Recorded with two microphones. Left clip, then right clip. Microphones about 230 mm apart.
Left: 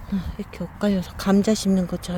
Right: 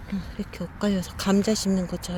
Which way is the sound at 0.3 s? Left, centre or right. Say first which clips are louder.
Left 2 dB; centre.